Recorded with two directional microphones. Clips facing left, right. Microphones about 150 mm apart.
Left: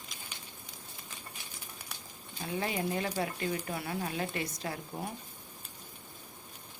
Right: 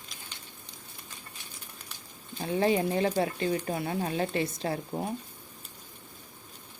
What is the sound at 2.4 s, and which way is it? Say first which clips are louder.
Speech: right 8 dB; 35° right (ahead or behind).